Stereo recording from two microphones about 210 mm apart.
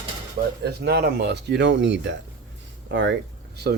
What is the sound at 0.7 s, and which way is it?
Speech, 50° right (ahead or behind).